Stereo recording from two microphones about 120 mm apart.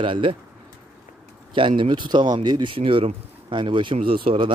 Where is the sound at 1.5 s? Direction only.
45° right (ahead or behind).